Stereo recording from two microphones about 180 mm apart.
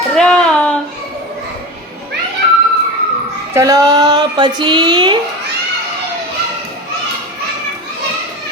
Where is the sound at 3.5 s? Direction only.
20° right (ahead or behind).